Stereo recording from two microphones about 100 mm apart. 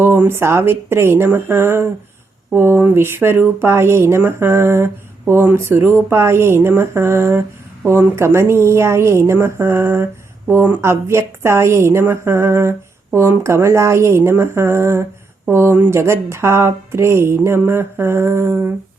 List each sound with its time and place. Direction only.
0.0 s speech: 25° right (ahead or behind)